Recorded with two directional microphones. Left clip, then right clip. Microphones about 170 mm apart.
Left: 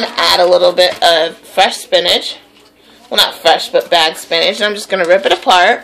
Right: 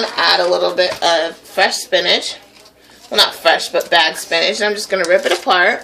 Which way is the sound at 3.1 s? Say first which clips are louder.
Left 2 dB; 25° left (ahead or behind).